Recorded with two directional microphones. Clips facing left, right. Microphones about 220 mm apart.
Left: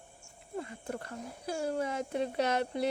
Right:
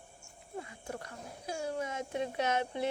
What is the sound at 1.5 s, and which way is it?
Speech, 35° left (ahead or behind).